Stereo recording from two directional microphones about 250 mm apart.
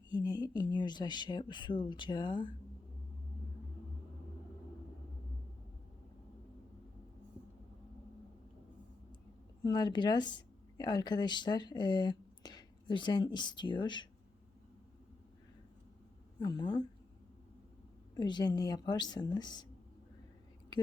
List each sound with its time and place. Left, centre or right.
0.1 s speech: centre
9.6 s speech: centre
16.4 s speech: centre
18.1 s speech: centre